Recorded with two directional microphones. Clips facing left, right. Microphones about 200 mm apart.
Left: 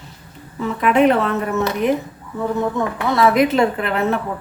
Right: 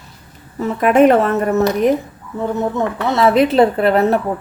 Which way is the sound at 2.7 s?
25° right (ahead or behind).